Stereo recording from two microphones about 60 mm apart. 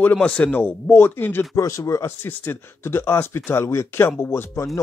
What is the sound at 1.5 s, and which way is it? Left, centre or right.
Speech, left.